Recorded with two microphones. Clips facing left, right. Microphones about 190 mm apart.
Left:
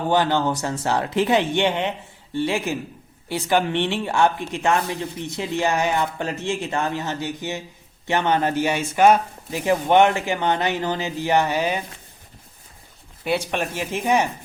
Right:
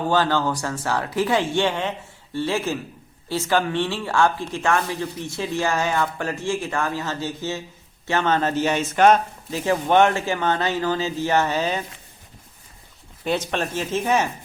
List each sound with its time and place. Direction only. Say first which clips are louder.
0.1 s speech: left 2 dB; 20° left (ahead or behind)
13.2 s speech: even; 10° left (ahead or behind)